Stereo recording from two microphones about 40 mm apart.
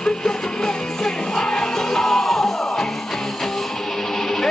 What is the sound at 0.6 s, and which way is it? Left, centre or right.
Music, centre.